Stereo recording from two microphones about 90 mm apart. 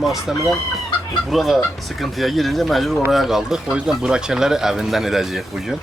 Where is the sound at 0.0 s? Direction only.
Centre (ahead or behind).